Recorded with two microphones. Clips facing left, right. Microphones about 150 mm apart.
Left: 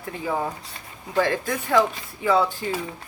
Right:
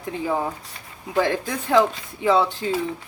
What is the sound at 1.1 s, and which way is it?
A woman's voice, 20° right (ahead or behind).